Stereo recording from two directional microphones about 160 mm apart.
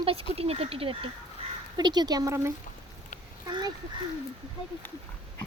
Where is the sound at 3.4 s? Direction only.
25° right (ahead or behind).